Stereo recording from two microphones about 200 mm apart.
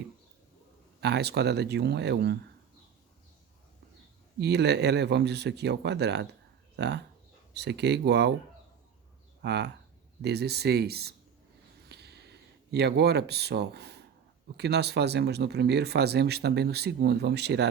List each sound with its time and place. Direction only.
1.0 s speech: 55° right (ahead or behind)
4.4 s speech: 55° right (ahead or behind)
9.4 s speech: 60° right (ahead or behind)
11.9 s a sound: 55° right (ahead or behind)
14.5 s speech: 55° right (ahead or behind)